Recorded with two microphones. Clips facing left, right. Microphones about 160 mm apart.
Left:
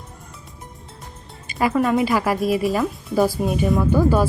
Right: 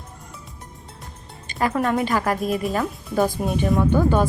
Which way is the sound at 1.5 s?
5° left (ahead or behind).